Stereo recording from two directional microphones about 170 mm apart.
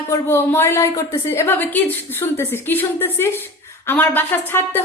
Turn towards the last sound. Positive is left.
turn(degrees=10)  # may be behind; listen again after turning